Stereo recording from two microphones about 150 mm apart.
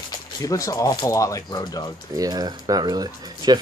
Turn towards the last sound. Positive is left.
turn(degrees=-25)  # may be behind; listen again after turning